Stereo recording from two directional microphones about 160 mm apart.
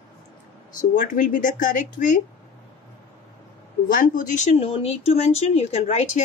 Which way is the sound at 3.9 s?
55° left (ahead or behind).